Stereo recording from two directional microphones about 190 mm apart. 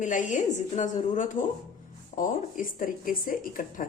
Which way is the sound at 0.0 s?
40° left (ahead or behind).